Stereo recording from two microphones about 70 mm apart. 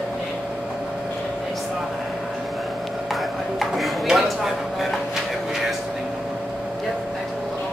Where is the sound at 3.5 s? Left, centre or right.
Centre.